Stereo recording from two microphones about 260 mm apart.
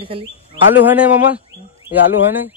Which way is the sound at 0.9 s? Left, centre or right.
Centre.